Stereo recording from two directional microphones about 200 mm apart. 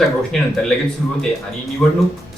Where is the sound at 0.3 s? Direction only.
Centre (ahead or behind).